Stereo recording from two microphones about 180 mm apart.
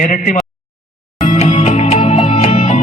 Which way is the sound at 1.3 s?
40° left (ahead or behind).